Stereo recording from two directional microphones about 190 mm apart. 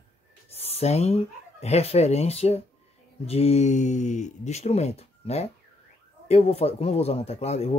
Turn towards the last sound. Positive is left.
turn(degrees=35)  # may be behind; listen again after turning